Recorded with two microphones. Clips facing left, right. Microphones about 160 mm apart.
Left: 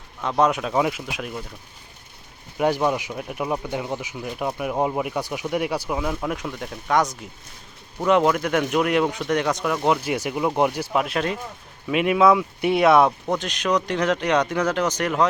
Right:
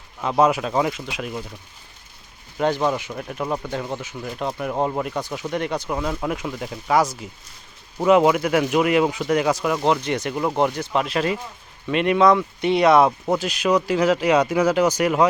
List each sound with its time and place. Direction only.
0.2 s speech: 5° right (ahead or behind)
2.6 s speech: 10° left (ahead or behind); by 15.3 s 10° right (ahead or behind)